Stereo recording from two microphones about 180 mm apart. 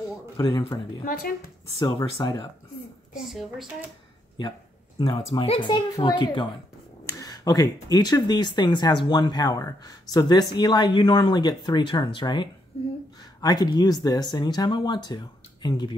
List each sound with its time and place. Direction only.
0.4 s speech: 25° left (ahead or behind)
1.0 s speech: 55° left (ahead or behind)
2.0 s speech: 25° left (ahead or behind)
3.2 s a child's voice: centre (ahead or behind)
4.4 s speech: 25° left (ahead or behind)